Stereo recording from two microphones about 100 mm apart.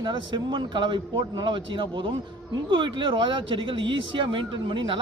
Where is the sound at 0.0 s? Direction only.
50° right (ahead or behind).